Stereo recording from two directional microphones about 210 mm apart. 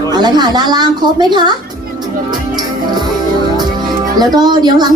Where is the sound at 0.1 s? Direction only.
20° right (ahead or behind).